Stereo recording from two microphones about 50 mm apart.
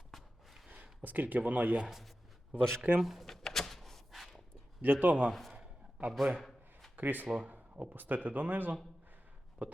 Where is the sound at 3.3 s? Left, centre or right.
Centre.